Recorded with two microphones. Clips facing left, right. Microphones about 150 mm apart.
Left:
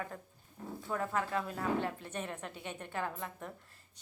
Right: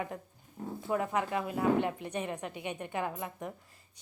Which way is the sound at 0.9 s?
15° right (ahead or behind).